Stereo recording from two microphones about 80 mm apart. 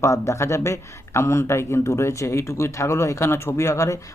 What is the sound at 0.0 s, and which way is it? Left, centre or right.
Speech, left.